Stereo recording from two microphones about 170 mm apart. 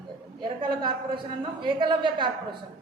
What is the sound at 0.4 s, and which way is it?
A woman's voice, 30° right (ahead or behind).